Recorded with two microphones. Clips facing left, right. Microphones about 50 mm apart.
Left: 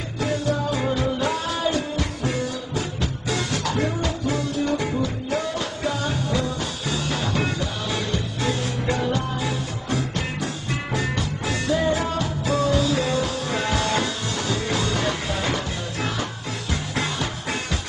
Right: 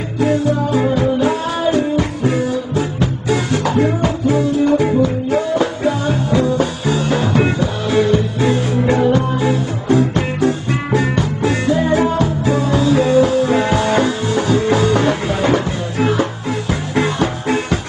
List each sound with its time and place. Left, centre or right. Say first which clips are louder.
0.2 s music: right 8 dB; centre